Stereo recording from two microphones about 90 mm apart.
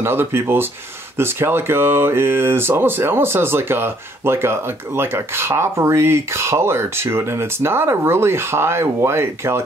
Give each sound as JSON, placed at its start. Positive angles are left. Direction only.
{"t": 0.0, "sound": "speech", "side_deg": -25}